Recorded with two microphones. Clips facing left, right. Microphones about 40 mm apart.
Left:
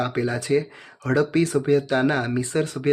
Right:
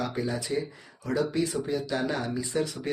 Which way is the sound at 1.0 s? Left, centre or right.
Left.